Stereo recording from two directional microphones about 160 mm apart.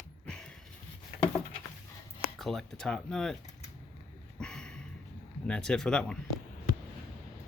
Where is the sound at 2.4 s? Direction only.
Centre (ahead or behind).